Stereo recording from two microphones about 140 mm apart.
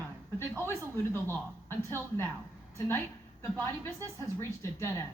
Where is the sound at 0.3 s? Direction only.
15° left (ahead or behind).